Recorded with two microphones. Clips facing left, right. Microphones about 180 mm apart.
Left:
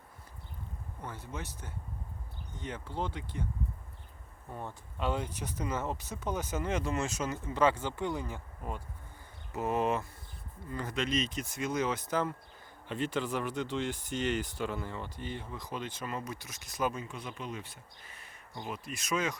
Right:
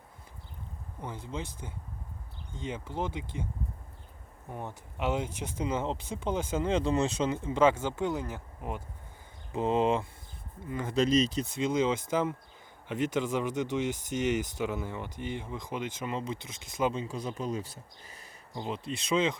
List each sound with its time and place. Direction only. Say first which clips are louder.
1.0 s speech: right 4 dB; 15° right (ahead or behind)
4.4 s speech: right 2 dB; 15° right (ahead or behind)
7.9 s speech: right 3 dB; 5° right (ahead or behind)
9.6 s speech: right 4 dB; 25° right (ahead or behind)
10.9 s speech: right 8 dB; 40° right (ahead or behind)
18.5 s speech: right 5 dB; 25° right (ahead or behind)